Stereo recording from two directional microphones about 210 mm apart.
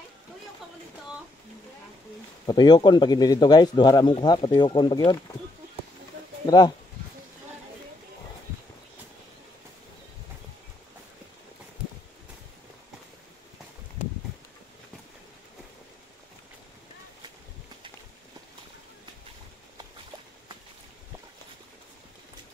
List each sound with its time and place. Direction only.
2.4 s a man's voice: 20° left (ahead or behind)
6.4 s speech: 20° left (ahead or behind)